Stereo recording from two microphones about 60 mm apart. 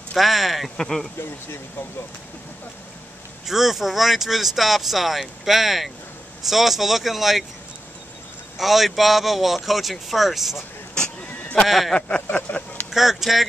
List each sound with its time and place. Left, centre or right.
0.1 s speech: centre
3.4 s speech: centre
8.5 s speech: centre
11.3 s sheep: left
11.6 s speech: centre
12.3 s vehicle: left
12.9 s speech: centre